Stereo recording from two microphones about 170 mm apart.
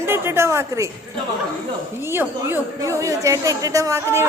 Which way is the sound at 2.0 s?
15° right (ahead or behind).